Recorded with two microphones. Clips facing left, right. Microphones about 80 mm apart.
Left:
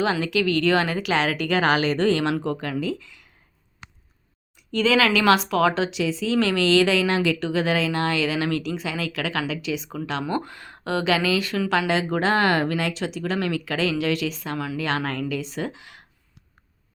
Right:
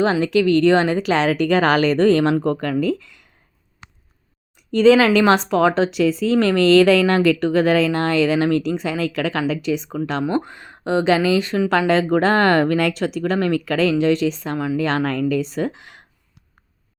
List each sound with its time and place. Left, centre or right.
0.0 s speech: right
4.7 s speech: right
10.2 s speech: right
11.7 s speech: right